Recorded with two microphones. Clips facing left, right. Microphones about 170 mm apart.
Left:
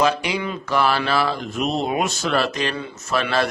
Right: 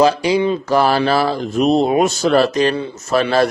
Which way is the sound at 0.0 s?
35° right (ahead or behind).